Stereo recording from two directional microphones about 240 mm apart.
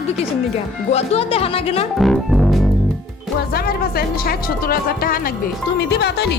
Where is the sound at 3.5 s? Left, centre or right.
Left.